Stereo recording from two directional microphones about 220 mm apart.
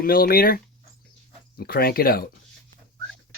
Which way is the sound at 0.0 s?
40° left (ahead or behind).